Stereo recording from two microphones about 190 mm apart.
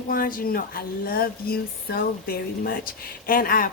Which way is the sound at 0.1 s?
45° left (ahead or behind).